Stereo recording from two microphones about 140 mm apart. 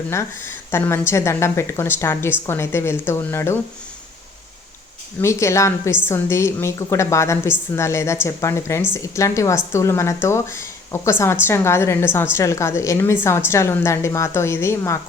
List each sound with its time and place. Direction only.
0.1 s speech: 20° left (ahead or behind)
5.2 s speech: 20° left (ahead or behind)